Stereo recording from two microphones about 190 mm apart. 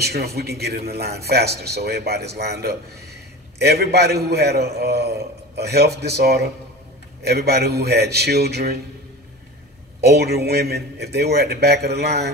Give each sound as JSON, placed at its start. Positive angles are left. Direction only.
{"t": 0.0, "sound": "a man's voice", "side_deg": -55}
{"t": 10.0, "sound": "a man's voice", "side_deg": -55}